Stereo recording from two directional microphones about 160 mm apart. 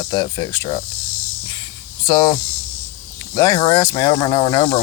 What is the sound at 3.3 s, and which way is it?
Speech, 25° left (ahead or behind).